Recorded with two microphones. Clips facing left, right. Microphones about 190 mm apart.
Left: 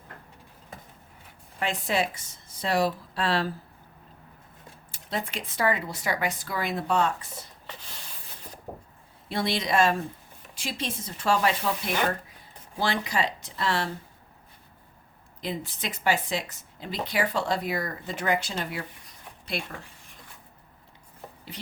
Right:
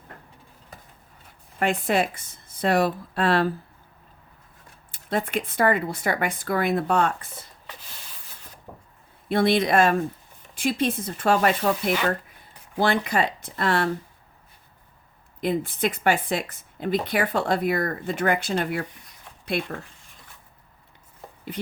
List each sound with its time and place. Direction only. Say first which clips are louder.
1.5 s speech: right 5 dB; 55° right (ahead or behind)
4.9 s speech: right 6 dB; 55° right (ahead or behind)
8.7 s a sound: left 4 dB; 40° left (ahead or behind)
9.3 s speech: right 6 dB; 55° right (ahead or behind)
12.8 s speech: right 5 dB; 55° right (ahead or behind)
15.4 s speech: right 9 dB; 55° right (ahead or behind)